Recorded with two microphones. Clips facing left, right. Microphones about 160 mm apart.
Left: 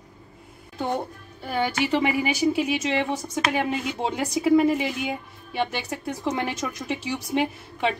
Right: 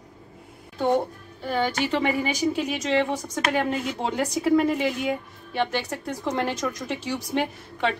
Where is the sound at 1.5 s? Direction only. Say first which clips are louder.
Even; 5° left (ahead or behind).